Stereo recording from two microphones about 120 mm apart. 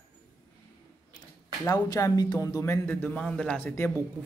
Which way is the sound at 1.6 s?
30° left (ahead or behind).